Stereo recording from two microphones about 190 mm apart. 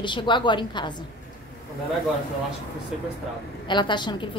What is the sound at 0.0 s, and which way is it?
Speech, 25° left (ahead or behind).